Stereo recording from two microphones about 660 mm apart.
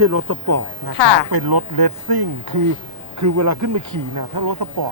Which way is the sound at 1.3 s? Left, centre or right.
Right.